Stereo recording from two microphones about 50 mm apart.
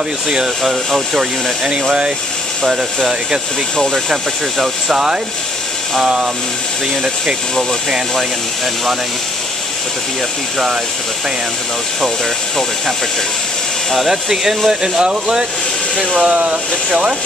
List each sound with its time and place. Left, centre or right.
0.3 s speech: centre
2.6 s speech: centre
13.9 s speech: centre
16.2 s speech: right